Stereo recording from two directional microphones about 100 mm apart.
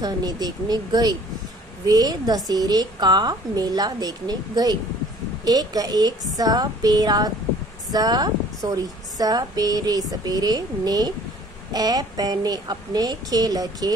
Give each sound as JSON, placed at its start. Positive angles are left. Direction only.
{"t": 0.0, "sound": "a woman's voice", "side_deg": -40}